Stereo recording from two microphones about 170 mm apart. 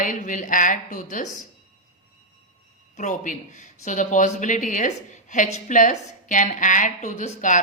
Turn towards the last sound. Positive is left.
turn(degrees=45)  # may be behind; listen again after turning